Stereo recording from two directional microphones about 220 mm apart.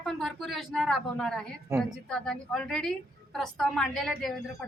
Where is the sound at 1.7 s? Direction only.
10° right (ahead or behind).